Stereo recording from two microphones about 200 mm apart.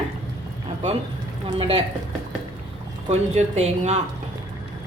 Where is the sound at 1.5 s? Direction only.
25° right (ahead or behind).